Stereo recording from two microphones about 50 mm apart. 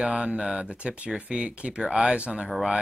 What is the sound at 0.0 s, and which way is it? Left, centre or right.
Speech, right.